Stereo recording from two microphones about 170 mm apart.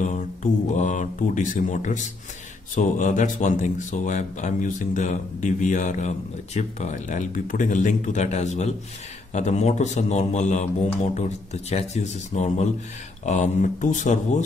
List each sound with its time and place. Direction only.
0.0 s speech: 45° left (ahead or behind)